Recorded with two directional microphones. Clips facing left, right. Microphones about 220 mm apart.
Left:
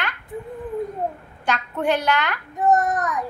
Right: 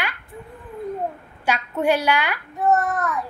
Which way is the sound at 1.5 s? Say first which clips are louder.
Right 2 dB; 10° right (ahead or behind).